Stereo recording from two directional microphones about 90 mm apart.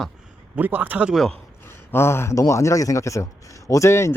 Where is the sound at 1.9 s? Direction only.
30° left (ahead or behind).